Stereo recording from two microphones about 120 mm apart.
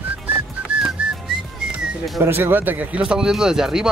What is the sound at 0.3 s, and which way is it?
Whistling, 10° right (ahead or behind).